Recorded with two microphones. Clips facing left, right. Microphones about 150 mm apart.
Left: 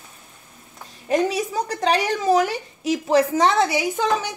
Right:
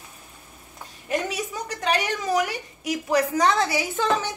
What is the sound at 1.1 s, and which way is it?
A woman's voice, 35° left (ahead or behind).